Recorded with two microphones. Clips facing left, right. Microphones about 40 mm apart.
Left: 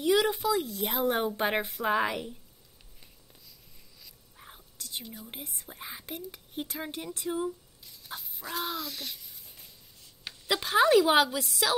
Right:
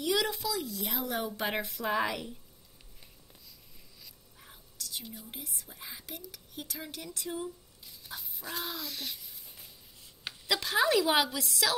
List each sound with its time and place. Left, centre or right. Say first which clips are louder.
0.0 s speech: left 5 dB; left
1.7 s a woman's voice: left 3 dB; centre
4.4 s whispering: left 1 dB; left
5.2 s speech: left 2 dB; left
7.8 s a sound: left 2 dB; centre
10.4 s a woman's voice: left 4 dB; centre